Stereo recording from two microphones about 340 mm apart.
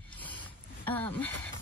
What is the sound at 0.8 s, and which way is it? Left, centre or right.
Speech, centre.